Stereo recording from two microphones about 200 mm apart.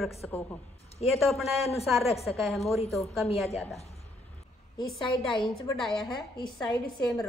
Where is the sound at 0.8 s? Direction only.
30° left (ahead or behind).